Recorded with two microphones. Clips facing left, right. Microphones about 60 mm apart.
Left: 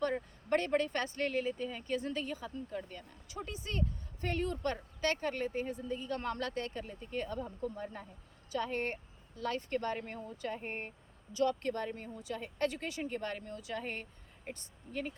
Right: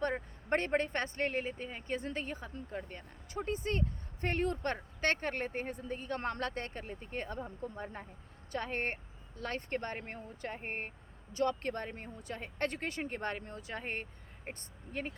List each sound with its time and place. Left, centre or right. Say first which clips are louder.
0.0 s speech: left 1 dB; right
8.5 s speech: left 1 dB; right